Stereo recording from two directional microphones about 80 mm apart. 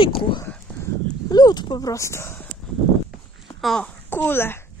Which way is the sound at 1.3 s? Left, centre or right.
Left.